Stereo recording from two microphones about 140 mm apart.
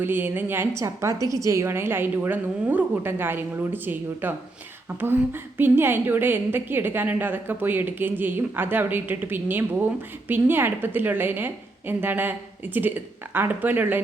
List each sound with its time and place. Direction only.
0.0 s a woman's voice: 15° right (ahead or behind)